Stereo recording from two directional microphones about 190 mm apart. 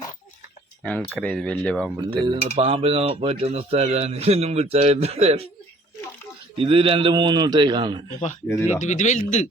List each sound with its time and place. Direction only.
0.8 s speech: 5° left (ahead or behind)
2.2 s speech: 25° right (ahead or behind)
6.6 s a man's voice: 30° right (ahead or behind)
8.8 s speech: 40° left (ahead or behind)